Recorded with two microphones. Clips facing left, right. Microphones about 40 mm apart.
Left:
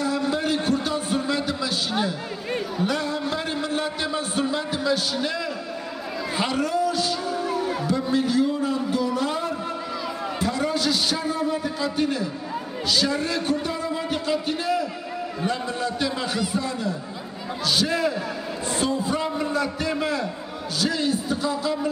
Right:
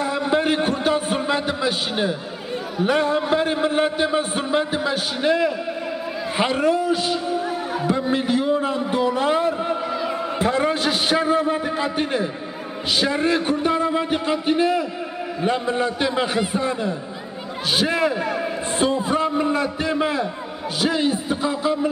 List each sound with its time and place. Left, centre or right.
0.0 s a sound: right
2.8 s a man's voice: right
18.9 s speech: right
19.1 s a man's voice: right